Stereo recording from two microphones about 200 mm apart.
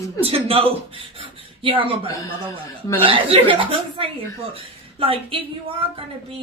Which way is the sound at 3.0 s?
25° right (ahead or behind).